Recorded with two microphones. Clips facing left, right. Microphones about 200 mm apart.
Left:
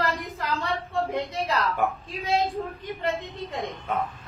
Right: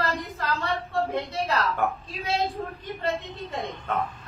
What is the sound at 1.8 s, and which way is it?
Speech, centre (ahead or behind).